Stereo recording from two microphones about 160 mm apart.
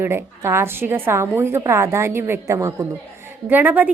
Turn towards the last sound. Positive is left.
turn(degrees=-10)  # may be behind; listen again after turning